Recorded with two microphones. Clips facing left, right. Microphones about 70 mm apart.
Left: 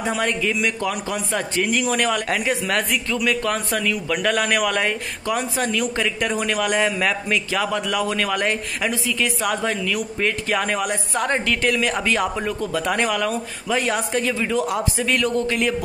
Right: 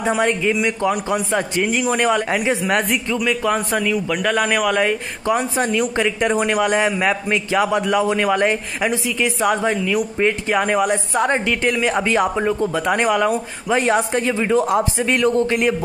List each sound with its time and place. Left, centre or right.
0.1 s a man's voice: centre
5.2 s a man's voice: right